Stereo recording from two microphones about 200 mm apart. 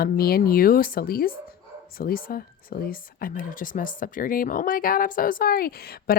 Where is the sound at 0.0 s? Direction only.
50° left (ahead or behind).